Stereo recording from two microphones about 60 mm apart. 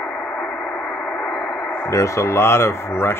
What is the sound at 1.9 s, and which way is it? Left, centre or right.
Speech, left.